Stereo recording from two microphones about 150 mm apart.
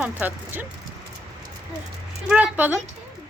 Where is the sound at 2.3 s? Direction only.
10° right (ahead or behind).